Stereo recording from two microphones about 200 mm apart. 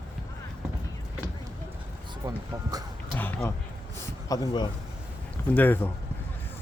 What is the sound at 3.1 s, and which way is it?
Speech, 10° left (ahead or behind).